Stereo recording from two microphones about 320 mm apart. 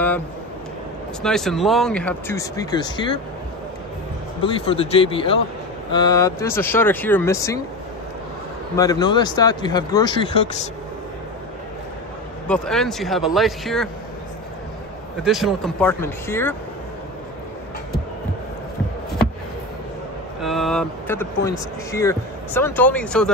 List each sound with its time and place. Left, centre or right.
1.2 s speech: centre
4.6 s speech: centre
8.7 s speech: centre
12.4 s speech: centre
15.2 s speech: centre
20.4 s speech: centre